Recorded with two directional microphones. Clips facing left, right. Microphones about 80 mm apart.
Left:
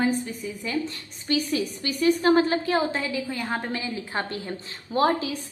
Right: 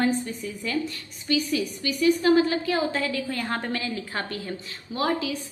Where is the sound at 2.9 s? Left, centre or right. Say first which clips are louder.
Right 1 dB; centre.